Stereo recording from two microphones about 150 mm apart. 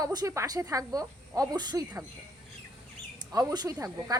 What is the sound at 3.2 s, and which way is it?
Speech, 25° right (ahead or behind).